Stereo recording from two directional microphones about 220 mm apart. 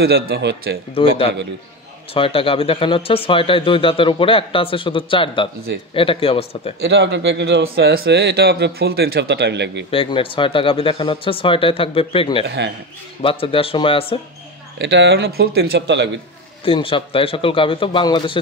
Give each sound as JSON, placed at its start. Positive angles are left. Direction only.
{"t": 0.0, "sound": "speech", "side_deg": -45}
{"t": 0.9, "sound": "speech", "side_deg": 25}
{"t": 6.8, "sound": "speech", "side_deg": -50}
{"t": 9.8, "sound": "speech", "side_deg": 25}
{"t": 12.4, "sound": "speech", "side_deg": -50}
{"t": 13.2, "sound": "speech", "side_deg": 25}
{"t": 14.8, "sound": "speech", "side_deg": -55}
{"t": 16.6, "sound": "speech", "side_deg": 25}